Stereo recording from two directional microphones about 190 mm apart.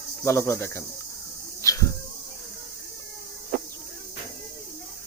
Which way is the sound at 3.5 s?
50° right (ahead or behind).